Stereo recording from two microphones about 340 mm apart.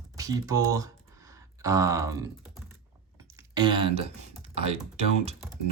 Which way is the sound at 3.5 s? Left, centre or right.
Centre.